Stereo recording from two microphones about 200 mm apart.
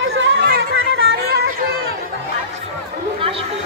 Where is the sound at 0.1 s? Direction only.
70° right (ahead or behind).